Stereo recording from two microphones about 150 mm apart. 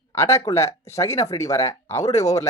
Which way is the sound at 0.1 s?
20° left (ahead or behind).